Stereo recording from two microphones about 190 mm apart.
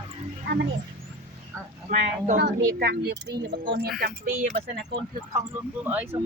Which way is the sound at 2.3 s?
55° right (ahead or behind).